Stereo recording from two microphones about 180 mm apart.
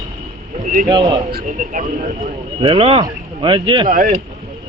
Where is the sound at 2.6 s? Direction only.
30° right (ahead or behind).